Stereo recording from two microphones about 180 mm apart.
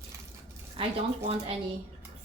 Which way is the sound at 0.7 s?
30° right (ahead or behind).